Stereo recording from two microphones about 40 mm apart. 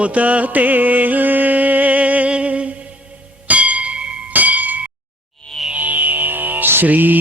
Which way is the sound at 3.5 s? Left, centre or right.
Right.